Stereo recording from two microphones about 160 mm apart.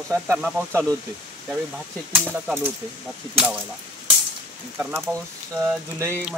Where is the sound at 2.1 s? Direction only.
10° right (ahead or behind).